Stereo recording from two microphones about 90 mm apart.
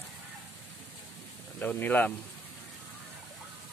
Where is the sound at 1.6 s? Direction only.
20° left (ahead or behind).